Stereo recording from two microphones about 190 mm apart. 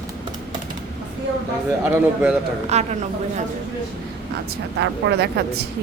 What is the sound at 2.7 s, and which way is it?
Speech, 35° right (ahead or behind).